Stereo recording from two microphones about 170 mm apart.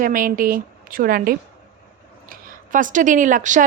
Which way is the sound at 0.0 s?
55° right (ahead or behind).